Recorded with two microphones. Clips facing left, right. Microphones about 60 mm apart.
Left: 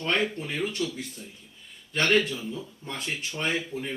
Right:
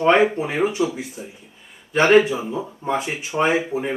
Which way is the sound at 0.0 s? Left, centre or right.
Centre.